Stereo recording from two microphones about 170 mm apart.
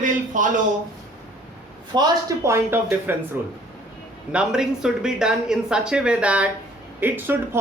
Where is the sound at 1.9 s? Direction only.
20° right (ahead or behind).